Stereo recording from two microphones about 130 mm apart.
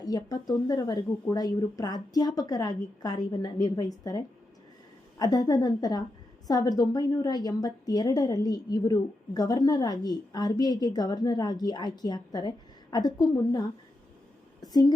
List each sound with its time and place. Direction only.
0.0 s a woman's voice: 30° left (ahead or behind)
5.2 s a woman's voice: 30° left (ahead or behind)